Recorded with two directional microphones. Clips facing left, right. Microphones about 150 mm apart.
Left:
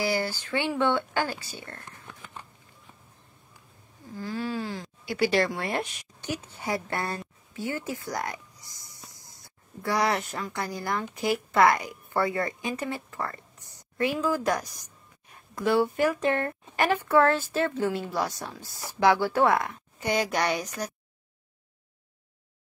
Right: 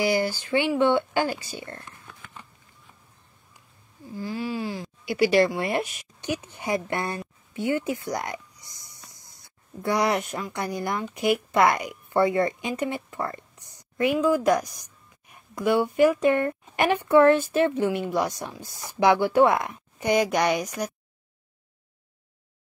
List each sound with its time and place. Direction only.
0.0 s a woman's voice: 15° right (ahead or behind)
4.2 s a woman's voice: 10° right (ahead or behind)
9.8 s a woman's voice: 20° right (ahead or behind)